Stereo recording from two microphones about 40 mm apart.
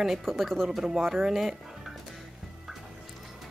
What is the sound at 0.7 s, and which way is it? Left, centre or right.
Speech, centre.